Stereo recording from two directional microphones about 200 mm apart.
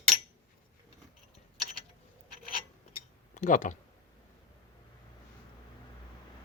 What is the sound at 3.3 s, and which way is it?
Speech, 40° left (ahead or behind).